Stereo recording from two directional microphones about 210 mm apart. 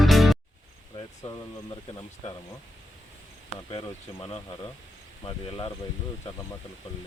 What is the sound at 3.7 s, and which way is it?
Speech, 25° left (ahead or behind).